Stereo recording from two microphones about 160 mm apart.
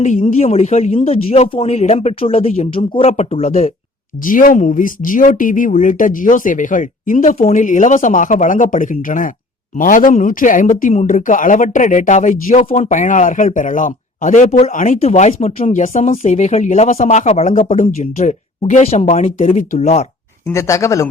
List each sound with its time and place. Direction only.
0.0 s speech: 45° left (ahead or behind)
4.3 s speech: 55° left (ahead or behind)
20.5 s speech: 20° left (ahead or behind)